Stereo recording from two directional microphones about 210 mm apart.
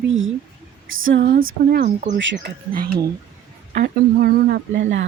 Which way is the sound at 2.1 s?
60° right (ahead or behind).